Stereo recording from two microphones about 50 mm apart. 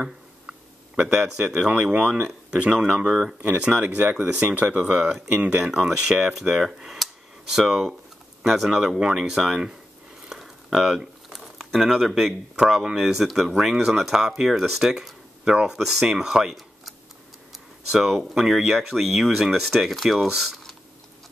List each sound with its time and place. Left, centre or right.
0.5 s speech: centre
3.4 s speech: right
5.6 s speech: centre
10.3 s a sound: centre
11.7 s speech: centre
13.7 s speech: centre
15.5 s speech: centre
15.8 s speech: centre